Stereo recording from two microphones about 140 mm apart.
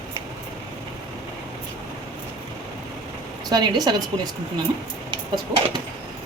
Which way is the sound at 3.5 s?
30° right (ahead or behind).